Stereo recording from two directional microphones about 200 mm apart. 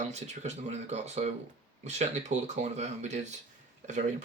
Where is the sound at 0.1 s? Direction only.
35° right (ahead or behind).